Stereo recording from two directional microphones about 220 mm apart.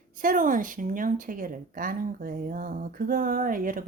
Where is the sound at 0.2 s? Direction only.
40° right (ahead or behind).